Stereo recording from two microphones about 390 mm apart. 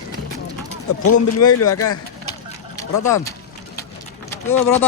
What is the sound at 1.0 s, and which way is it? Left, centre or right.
Speech, left.